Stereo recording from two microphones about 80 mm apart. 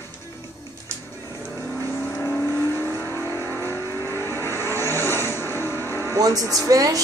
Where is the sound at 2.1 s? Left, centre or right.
Left.